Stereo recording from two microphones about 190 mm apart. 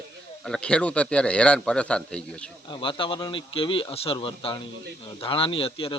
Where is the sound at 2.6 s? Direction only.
25° left (ahead or behind).